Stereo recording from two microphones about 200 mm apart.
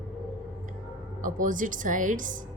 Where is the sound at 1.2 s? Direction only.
40° right (ahead or behind).